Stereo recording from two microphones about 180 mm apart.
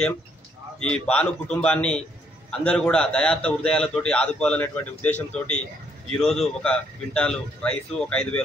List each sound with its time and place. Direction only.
1.0 s a man's voice: 5° left (ahead or behind)